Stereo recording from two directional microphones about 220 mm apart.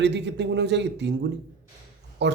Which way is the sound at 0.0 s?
50° right (ahead or behind).